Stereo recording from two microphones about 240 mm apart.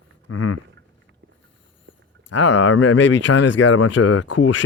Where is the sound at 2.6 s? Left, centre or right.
Left.